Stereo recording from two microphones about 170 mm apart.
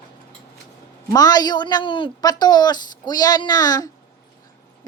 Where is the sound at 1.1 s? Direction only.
20° left (ahead or behind).